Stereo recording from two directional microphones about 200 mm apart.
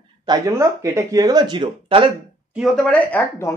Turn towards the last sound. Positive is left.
turn(degrees=10)  # may be behind; listen again after turning